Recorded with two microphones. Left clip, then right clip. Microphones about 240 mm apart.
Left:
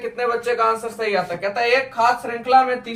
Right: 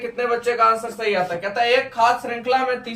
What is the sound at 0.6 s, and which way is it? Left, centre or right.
Speech, centre.